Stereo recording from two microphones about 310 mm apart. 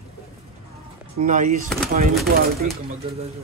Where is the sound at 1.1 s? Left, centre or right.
Right.